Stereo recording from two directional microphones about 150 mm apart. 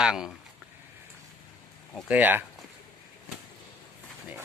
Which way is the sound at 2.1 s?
10° right (ahead or behind).